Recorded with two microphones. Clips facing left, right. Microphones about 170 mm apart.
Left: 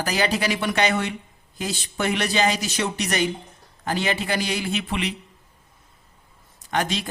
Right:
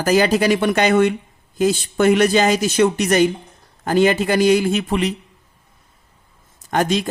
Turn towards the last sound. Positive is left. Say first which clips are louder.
# right 6 dB
turn(degrees=-45)  # may be behind; listen again after turning